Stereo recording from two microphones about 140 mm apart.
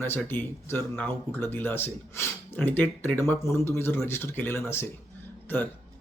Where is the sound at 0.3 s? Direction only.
15° left (ahead or behind).